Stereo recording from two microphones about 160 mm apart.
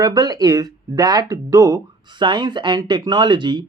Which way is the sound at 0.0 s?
25° right (ahead or behind).